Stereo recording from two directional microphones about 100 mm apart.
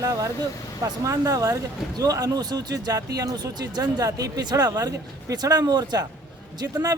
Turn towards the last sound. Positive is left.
turn(degrees=-40)  # may be behind; listen again after turning